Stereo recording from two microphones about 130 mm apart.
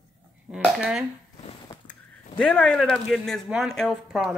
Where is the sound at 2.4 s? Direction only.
10° left (ahead or behind).